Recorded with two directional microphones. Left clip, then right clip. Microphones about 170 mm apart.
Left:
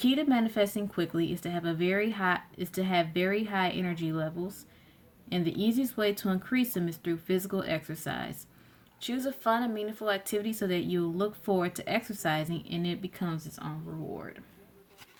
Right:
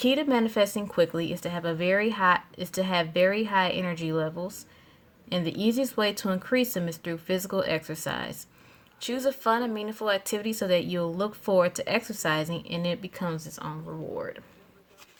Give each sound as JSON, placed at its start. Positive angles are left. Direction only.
{"t": 0.0, "sound": "speech", "side_deg": -50}